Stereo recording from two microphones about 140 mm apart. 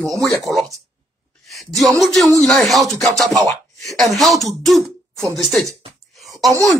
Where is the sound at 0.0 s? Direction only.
Centre (ahead or behind).